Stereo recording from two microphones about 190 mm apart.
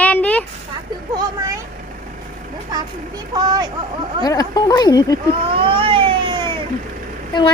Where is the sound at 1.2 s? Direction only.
20° right (ahead or behind).